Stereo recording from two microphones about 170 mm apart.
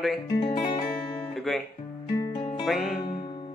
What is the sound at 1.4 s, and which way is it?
Guitar, centre (ahead or behind).